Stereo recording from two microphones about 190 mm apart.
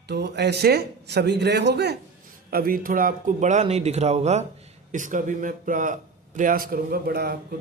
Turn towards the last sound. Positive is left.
turn(degrees=-55)  # may be behind; listen again after turning